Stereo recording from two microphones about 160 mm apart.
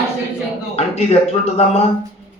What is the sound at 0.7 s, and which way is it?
Speech, 40° left (ahead or behind).